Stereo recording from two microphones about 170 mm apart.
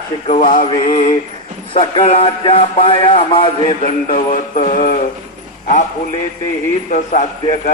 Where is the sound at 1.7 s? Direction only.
30° left (ahead or behind).